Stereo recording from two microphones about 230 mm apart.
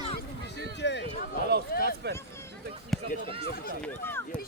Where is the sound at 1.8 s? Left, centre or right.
Right.